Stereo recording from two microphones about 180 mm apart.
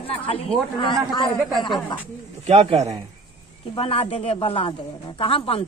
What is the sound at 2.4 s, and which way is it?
Speech, 35° right (ahead or behind).